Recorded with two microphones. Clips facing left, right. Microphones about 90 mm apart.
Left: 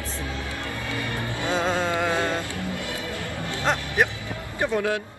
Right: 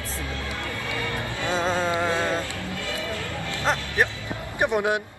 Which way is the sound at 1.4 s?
15° left (ahead or behind).